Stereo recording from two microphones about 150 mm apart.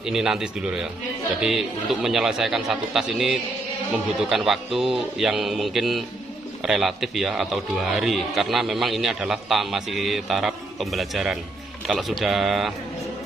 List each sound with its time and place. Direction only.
0.0 s a man's voice: 5° right (ahead or behind)